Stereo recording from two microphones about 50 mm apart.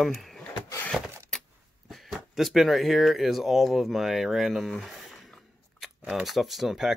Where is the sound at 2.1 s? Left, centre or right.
Centre.